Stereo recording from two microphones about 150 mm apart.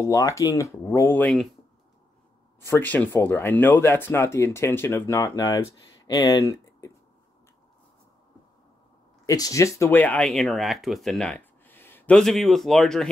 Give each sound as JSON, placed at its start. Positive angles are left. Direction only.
{"t": 0.0, "sound": "speech", "side_deg": 20}
{"t": 2.6, "sound": "speech", "side_deg": 15}
{"t": 9.2, "sound": "speech", "side_deg": 20}
{"t": 12.2, "sound": "speech", "side_deg": 0}